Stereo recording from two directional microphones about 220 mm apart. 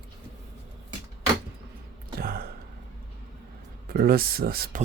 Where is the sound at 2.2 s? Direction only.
45° right (ahead or behind).